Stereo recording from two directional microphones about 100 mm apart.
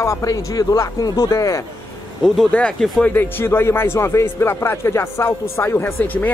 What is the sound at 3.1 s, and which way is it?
Speech, 20° left (ahead or behind).